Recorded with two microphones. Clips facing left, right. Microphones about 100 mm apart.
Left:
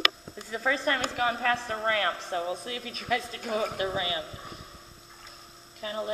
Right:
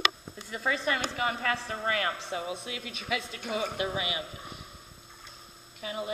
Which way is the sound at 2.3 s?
5° right (ahead or behind).